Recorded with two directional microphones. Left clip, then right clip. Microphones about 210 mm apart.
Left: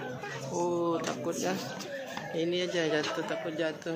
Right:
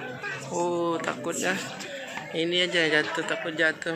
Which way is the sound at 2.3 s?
Centre (ahead or behind).